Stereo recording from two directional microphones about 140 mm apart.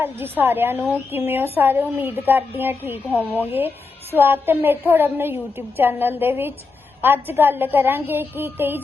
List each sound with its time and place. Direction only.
0.0 s a woman's voice: 15° right (ahead or behind)